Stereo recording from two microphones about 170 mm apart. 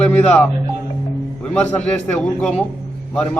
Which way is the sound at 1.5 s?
5° left (ahead or behind).